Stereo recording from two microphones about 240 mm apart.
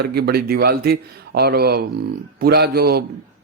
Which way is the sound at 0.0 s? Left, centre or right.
Right.